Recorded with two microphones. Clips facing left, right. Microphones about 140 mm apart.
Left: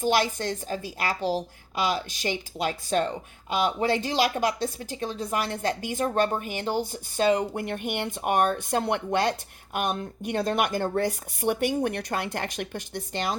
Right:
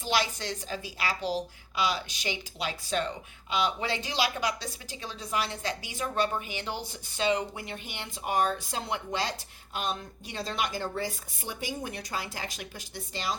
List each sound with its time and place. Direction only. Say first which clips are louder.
0.0 s a woman's voice: left 6 dB; 50° left (ahead or behind)